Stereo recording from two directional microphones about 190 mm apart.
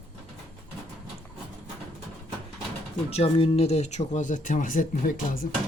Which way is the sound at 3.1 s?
30° left (ahead or behind).